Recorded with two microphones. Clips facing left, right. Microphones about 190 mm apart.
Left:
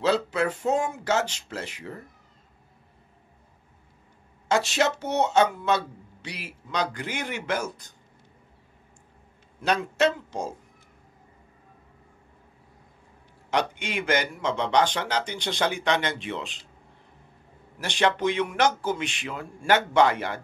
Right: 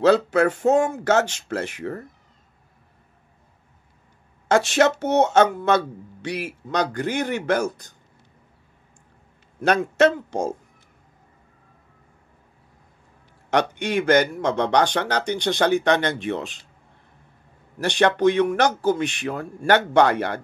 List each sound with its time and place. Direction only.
0.0 s speech: 50° right (ahead or behind)
4.5 s speech: 50° right (ahead or behind)
9.6 s speech: 50° right (ahead or behind)
13.5 s speech: 45° right (ahead or behind)
14.8 s a man's voice: 65° right (ahead or behind)
15.7 s speech: 45° right (ahead or behind)
17.8 s a man's voice: 55° right (ahead or behind)